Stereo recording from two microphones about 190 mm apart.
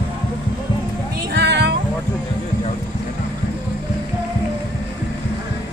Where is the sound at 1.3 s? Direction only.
60° right (ahead or behind).